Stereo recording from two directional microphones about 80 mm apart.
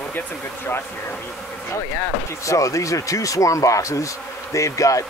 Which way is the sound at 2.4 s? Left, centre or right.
Left.